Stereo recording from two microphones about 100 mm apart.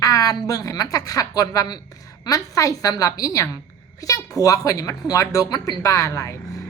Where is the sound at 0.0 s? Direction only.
35° left (ahead or behind).